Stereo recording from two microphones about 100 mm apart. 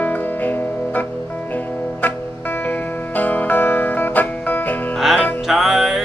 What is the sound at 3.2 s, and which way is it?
Music, 15° left (ahead or behind).